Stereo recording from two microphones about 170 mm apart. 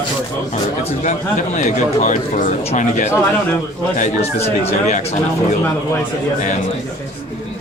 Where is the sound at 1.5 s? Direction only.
45° left (ahead or behind).